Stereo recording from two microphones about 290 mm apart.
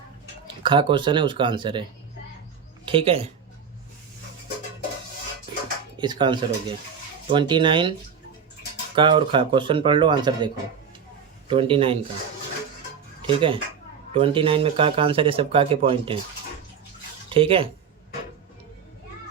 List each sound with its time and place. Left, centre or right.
0.4 s speech: centre
2.8 s speech: centre
6.0 s speech: centre
9.0 s speech: centre
13.2 s speech: centre
17.2 s speech: centre